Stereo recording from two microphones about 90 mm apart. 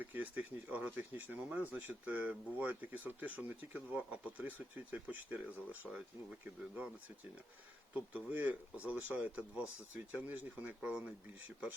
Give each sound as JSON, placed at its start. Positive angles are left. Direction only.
{"t": 0.0, "sound": "speech", "side_deg": -15}
{"t": 7.9, "sound": "speech", "side_deg": -15}